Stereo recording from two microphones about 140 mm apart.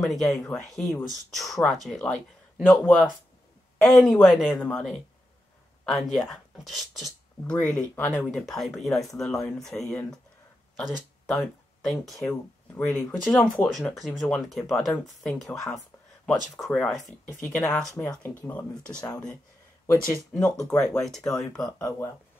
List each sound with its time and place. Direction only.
0.0 s speech: centre (ahead or behind)
20.5 s speech: 20° left (ahead or behind)
20.9 s speech: 5° left (ahead or behind)